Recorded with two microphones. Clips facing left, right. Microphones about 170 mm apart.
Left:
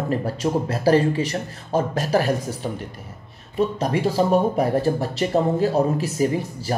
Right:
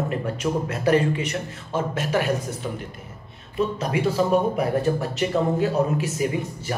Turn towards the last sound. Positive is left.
turn(degrees=35)  # may be behind; listen again after turning